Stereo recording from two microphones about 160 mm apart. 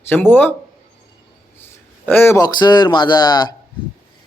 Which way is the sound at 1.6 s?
15° left (ahead or behind).